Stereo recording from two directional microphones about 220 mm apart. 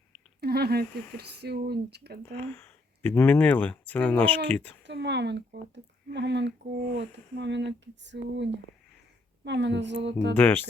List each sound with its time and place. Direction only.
0.3 s speech: 45° right (ahead or behind)
2.4 s speech: 10° left (ahead or behind)
4.8 s speech: 50° right (ahead or behind)
10.3 s speech: 10° left (ahead or behind)